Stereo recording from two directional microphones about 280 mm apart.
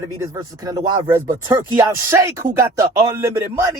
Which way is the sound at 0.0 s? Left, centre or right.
Centre.